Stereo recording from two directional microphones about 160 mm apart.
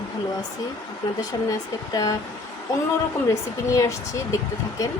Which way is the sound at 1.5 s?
20° left (ahead or behind).